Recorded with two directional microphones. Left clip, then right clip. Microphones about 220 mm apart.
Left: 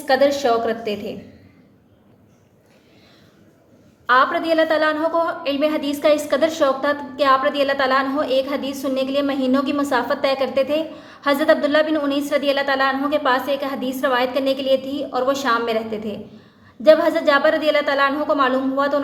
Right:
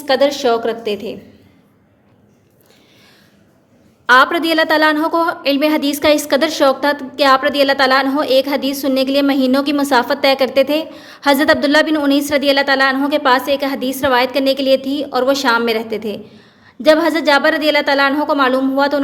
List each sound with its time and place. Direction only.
0.0 s a woman's voice: 30° right (ahead or behind)
4.0 s a woman's voice: 40° right (ahead or behind)